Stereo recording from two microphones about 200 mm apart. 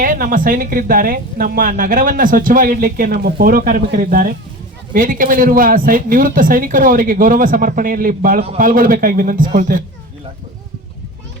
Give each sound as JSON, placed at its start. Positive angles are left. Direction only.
{"t": 0.0, "sound": "speech", "side_deg": -45}